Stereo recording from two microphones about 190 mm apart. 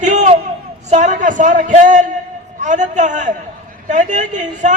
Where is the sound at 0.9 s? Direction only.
40° right (ahead or behind).